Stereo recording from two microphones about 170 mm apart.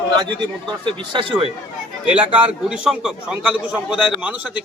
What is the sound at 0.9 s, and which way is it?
Speech, 30° right (ahead or behind).